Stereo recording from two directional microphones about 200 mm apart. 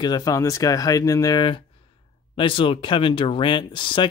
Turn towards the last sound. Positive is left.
turn(degrees=25)  # may be behind; listen again after turning